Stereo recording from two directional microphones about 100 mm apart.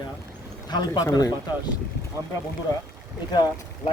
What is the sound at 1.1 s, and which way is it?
Speech, 45° left (ahead or behind).